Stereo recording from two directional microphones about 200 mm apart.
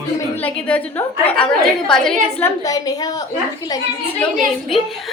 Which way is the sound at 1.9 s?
5° left (ahead or behind).